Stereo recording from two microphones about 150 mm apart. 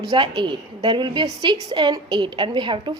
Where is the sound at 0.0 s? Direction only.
30° right (ahead or behind).